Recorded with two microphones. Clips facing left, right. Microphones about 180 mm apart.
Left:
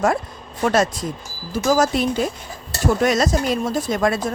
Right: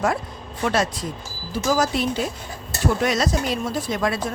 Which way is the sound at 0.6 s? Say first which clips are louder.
Left 4 dB; 45° left (ahead or behind).